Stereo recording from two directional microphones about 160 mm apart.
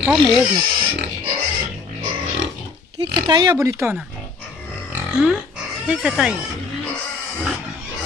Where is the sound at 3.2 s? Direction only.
25° right (ahead or behind).